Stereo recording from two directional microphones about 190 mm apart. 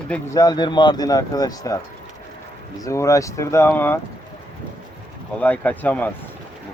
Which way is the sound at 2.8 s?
15° left (ahead or behind).